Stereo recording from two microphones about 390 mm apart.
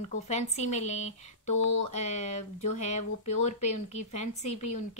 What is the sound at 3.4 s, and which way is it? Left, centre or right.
Speech, centre.